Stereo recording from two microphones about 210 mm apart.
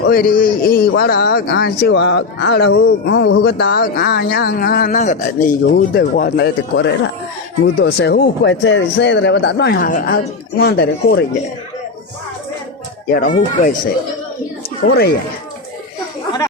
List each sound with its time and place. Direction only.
0.1 s a man's voice: 45° left (ahead or behind)
10.6 s a man's voice: 55° left (ahead or behind)
13.1 s speech: 40° left (ahead or behind)
14.8 s a man's voice: 50° left (ahead or behind)